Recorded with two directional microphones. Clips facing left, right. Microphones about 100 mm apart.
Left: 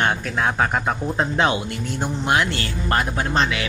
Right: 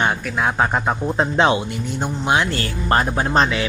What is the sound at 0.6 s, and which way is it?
Speech, 20° right (ahead or behind).